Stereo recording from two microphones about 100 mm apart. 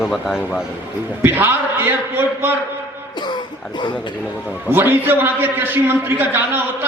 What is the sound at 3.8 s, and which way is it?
Speech, 50° left (ahead or behind).